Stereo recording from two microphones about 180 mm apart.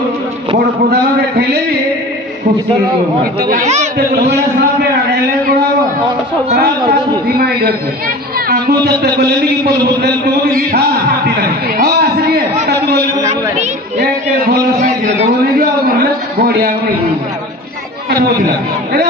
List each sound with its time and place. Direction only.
3.4 s speech: 50° right (ahead or behind)
3.9 s a man's voice: 60° right (ahead or behind)
7.3 s a man's voice: 60° right (ahead or behind)
10.5 s a sound: 50° right (ahead or behind)
13.6 s a sound: 45° right (ahead or behind)
16.0 s a man's voice: 60° right (ahead or behind)